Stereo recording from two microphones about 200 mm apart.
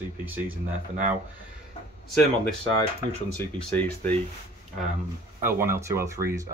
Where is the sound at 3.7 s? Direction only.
10° left (ahead or behind).